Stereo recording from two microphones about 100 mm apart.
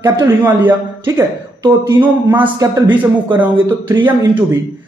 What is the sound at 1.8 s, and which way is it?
Speech, 20° right (ahead or behind).